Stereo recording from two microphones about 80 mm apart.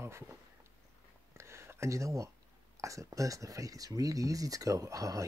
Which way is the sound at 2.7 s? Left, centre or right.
Right.